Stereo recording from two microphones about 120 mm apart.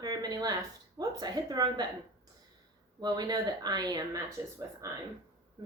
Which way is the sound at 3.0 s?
35° right (ahead or behind).